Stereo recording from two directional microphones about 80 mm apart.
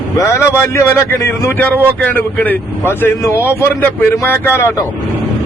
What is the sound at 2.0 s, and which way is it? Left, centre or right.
Speech, left.